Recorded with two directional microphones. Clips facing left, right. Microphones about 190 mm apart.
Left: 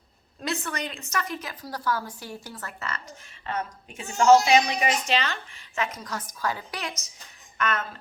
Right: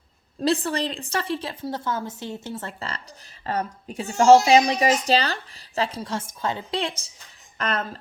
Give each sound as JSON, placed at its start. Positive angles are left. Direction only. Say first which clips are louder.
{"t": 0.4, "sound": "a woman's voice", "louder": "right 8 dB", "side_deg": -30}